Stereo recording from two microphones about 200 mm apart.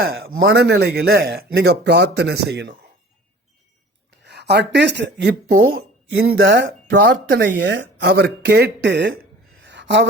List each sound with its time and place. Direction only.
0.3 s a man's voice: 75° right (ahead or behind); by 2.7 s 55° right (ahead or behind)
4.2 s speech: 60° right (ahead or behind)
6.3 s a man's voice: 65° right (ahead or behind)
7.3 s a man's voice: 55° right (ahead or behind)
9.6 s a sound: 65° right (ahead or behind)